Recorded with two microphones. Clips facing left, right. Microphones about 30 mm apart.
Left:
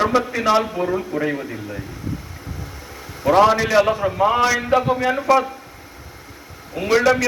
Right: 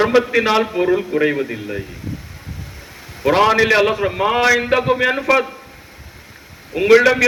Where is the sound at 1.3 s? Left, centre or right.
Right.